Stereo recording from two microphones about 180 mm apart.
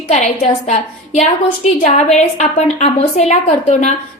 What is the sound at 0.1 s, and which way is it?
A woman's voice, 40° left (ahead or behind).